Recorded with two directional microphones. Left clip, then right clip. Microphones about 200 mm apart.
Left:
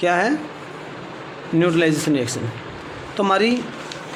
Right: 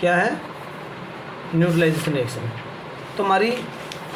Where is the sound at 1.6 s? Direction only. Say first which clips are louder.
Left 2 dB; 55° left (ahead or behind).